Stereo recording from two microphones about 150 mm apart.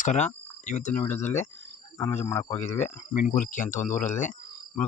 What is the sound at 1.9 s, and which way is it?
Speech, 15° left (ahead or behind).